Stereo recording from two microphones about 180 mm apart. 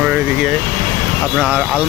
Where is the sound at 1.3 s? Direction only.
5° right (ahead or behind).